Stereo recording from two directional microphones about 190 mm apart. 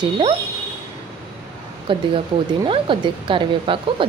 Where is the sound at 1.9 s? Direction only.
25° right (ahead or behind).